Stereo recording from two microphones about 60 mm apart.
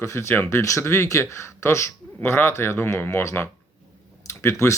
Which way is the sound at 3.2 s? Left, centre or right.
Left.